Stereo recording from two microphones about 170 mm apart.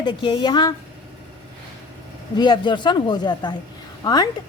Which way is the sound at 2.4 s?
25° left (ahead or behind).